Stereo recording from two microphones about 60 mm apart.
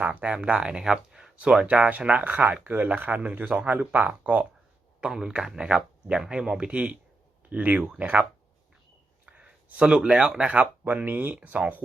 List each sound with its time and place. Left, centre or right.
0.0 s speech: right
1.6 s speech: right
4.9 s speech: centre; by 11.3 s right